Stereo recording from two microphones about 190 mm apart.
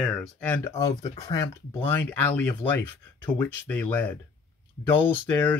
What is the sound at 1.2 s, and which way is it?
Speech, 20° left (ahead or behind).